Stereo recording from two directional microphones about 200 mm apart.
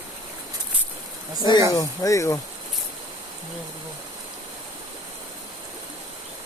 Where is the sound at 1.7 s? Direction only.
15° left (ahead or behind).